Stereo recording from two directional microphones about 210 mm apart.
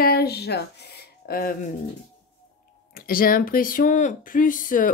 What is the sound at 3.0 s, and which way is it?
A woman's voice, 45° left (ahead or behind).